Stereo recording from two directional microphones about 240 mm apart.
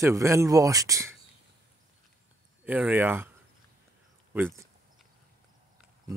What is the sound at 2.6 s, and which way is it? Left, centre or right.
Speech, centre.